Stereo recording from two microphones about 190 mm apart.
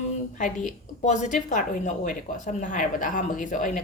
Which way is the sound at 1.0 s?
40° left (ahead or behind).